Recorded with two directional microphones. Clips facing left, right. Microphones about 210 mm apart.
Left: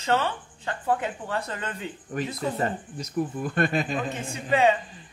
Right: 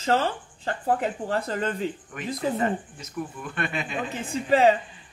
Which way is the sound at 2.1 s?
35° left (ahead or behind).